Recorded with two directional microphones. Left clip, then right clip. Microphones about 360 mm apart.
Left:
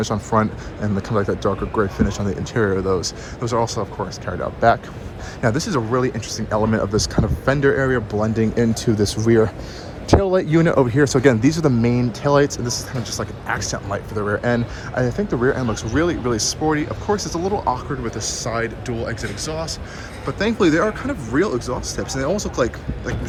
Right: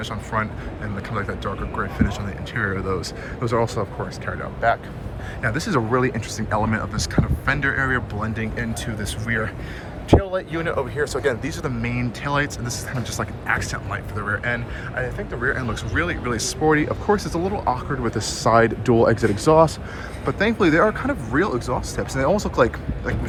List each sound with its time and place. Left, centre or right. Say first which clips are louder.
0.0 s speech: left 6 dB; centre
4.3 s speech: left 5 dB; centre